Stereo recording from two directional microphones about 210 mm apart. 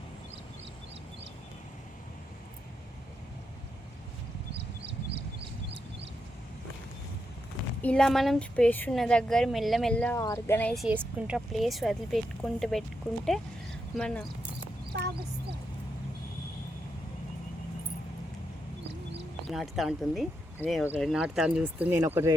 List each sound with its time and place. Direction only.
4.5 s a sound: 50° right (ahead or behind)
7.8 s a woman's voice: 5° left (ahead or behind)
10.8 s a woman's voice: 5° right (ahead or behind)
13.9 s speech: 5° left (ahead or behind)
19.5 s a woman's voice: centre (ahead or behind)